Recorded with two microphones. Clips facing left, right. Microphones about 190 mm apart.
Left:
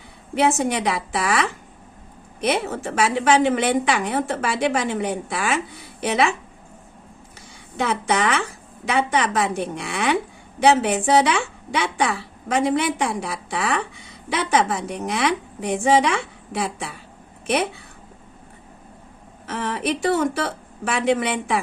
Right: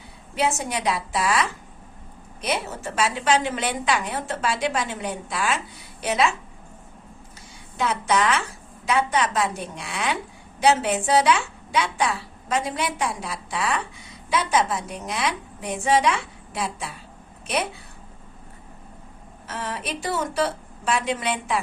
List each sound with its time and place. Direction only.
0.3 s a woman's voice: 60° left (ahead or behind)
7.8 s a woman's voice: 60° left (ahead or behind)
19.5 s a woman's voice: 60° left (ahead or behind)